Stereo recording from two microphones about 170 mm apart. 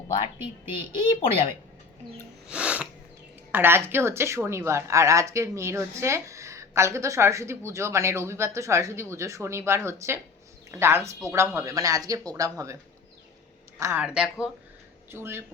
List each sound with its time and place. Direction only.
0.7 s speech: 35° left (ahead or behind)
2.5 s music: 5° right (ahead or behind)
3.5 s speech: 15° right (ahead or behind)
13.7 s speech: 15° right (ahead or behind)
14.0 s speech: 5° right (ahead or behind)